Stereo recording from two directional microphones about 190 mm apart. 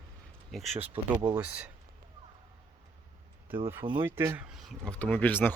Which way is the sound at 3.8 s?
25° right (ahead or behind).